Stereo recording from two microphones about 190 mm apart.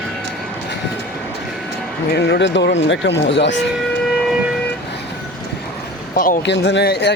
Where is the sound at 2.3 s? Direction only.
70° left (ahead or behind).